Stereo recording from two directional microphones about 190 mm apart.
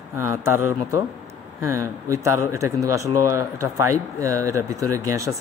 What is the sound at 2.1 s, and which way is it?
Speech, 15° right (ahead or behind).